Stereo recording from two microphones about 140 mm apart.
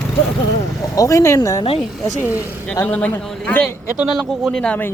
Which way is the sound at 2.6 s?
10° left (ahead or behind).